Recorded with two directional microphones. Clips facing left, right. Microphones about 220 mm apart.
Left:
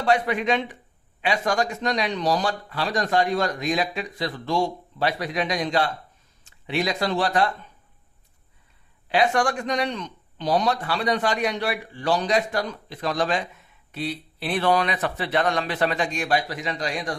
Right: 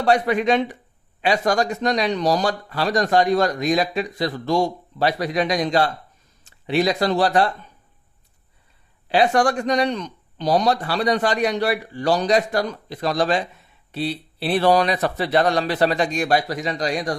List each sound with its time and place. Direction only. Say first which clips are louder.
0.0 s speech: right 4 dB; 40° right (ahead or behind)
9.0 s speech: right 4 dB; 35° right (ahead or behind)